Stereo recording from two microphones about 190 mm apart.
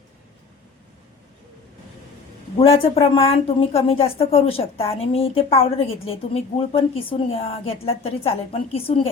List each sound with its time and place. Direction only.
2.6 s a woman's voice: 30° left (ahead or behind)